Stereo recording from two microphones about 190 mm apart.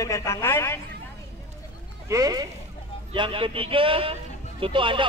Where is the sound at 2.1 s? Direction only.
20° right (ahead or behind).